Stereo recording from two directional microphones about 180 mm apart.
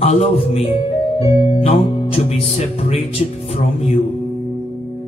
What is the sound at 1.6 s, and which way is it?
Speech, 35° left (ahead or behind).